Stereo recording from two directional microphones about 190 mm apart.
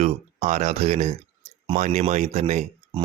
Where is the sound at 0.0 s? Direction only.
35° right (ahead or behind).